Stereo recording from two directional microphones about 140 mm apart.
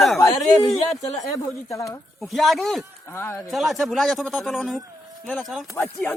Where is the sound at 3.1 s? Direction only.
20° left (ahead or behind).